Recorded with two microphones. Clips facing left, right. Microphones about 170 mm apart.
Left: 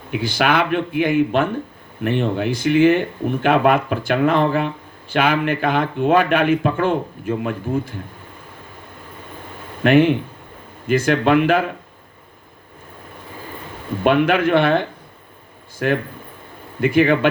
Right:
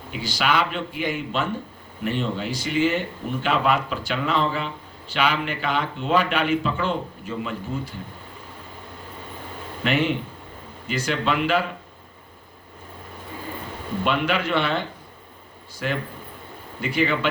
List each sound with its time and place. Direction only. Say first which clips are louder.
0.1 s a man's voice: left 5 dB; 55° left (ahead or behind)
9.8 s speech: left 9 dB; 55° left (ahead or behind)
14.0 s a man's voice: left 8 dB; 55° left (ahead or behind)